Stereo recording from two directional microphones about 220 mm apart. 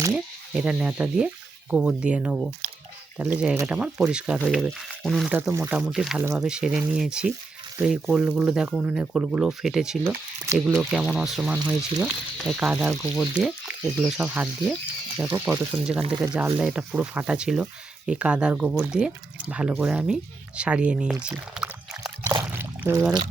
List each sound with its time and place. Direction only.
0.1 s speech: 5° right (ahead or behind)
10.4 s speech: 15° right (ahead or behind)
10.8 s speech: centre (ahead or behind)
16.0 s speech: 25° right (ahead or behind)
16.2 s speech: 5° right (ahead or behind)
22.4 s a sound: 10° right (ahead or behind)